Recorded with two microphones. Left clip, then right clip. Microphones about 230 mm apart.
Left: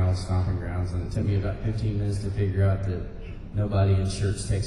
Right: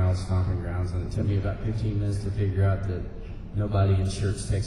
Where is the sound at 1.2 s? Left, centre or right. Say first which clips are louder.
Left 1 dB; centre.